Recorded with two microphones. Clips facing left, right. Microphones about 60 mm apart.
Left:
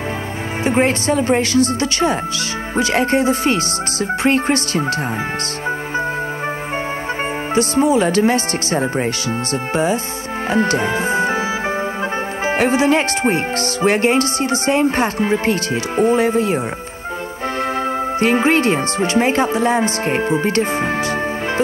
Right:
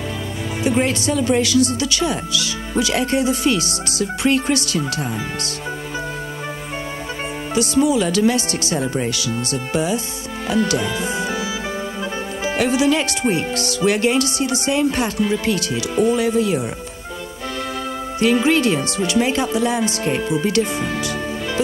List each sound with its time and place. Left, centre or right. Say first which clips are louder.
0.7 s speech: left 3 dB; left
7.5 s speech: left 2 dB; left
10.5 s speech: left 2 dB; left
12.4 s speech: left 2 dB; left
18.2 s speech: even; left